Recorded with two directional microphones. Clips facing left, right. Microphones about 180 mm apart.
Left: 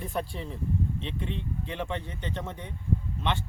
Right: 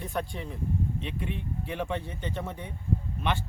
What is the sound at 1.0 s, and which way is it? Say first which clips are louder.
Speech: even; 25° left (ahead or behind).